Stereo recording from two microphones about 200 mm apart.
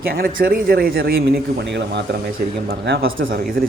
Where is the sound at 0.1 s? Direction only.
50° right (ahead or behind).